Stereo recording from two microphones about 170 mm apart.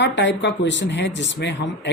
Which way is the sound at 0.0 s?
90° left.